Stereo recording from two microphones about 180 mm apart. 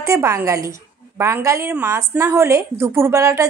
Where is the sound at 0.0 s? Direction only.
15° right (ahead or behind).